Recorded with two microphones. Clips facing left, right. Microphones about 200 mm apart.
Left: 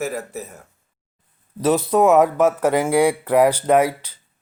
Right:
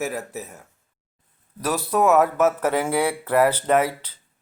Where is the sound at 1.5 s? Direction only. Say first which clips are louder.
Left 6 dB; 20° left (ahead or behind).